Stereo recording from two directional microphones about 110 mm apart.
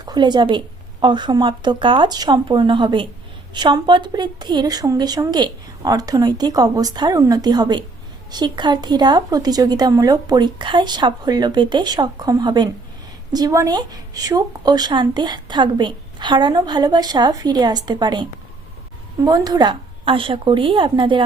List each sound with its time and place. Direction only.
0.0 s a woman's voice: 40° right (ahead or behind)